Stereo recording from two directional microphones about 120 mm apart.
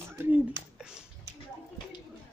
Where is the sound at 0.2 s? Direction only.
15° right (ahead or behind).